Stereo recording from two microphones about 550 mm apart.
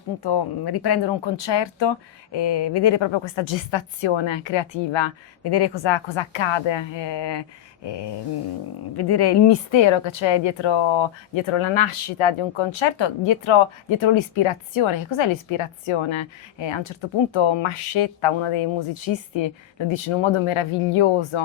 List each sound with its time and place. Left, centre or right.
0.2 s a woman's voice: left